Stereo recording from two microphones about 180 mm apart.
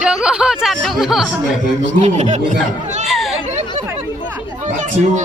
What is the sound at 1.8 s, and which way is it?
Speech, 40° right (ahead or behind).